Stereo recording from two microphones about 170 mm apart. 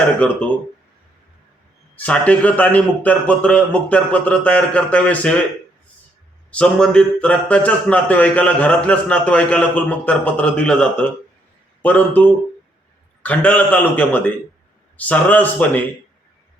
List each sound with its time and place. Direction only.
0.2 s speech: 10° left (ahead or behind)
2.0 s speech: 10° left (ahead or behind)
6.5 s speech: 5° left (ahead or behind)